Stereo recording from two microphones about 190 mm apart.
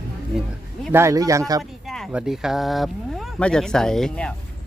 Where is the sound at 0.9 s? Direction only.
15° right (ahead or behind).